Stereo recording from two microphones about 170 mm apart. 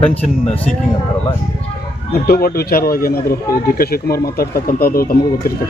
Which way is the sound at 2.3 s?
60° left (ahead or behind).